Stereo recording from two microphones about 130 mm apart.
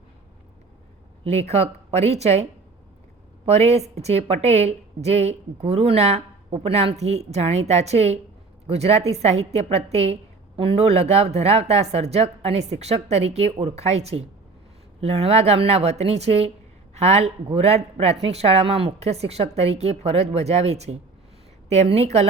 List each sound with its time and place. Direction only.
1.2 s a woman's voice: 55° right (ahead or behind)